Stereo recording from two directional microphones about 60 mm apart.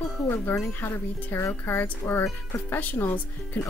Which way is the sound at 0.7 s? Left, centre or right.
Left.